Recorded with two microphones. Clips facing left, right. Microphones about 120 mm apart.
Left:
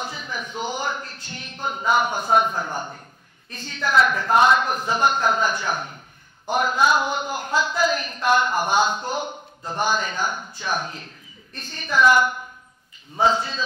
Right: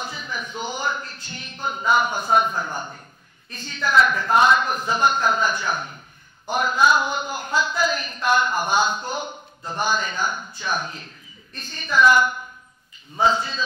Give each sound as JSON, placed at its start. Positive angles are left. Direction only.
{"t": 0.0, "sound": "a sound", "side_deg": 55}
{"t": 0.6, "sound": "a woman's voice", "side_deg": 60}
{"t": 2.7, "sound": "a man's voice", "side_deg": 30}
{"t": 3.4, "sound": "a woman's voice", "side_deg": 60}